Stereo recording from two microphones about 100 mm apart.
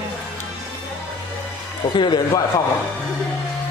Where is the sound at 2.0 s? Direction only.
50° left (ahead or behind).